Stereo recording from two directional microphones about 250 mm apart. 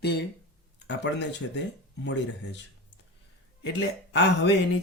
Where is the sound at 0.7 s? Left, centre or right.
Left.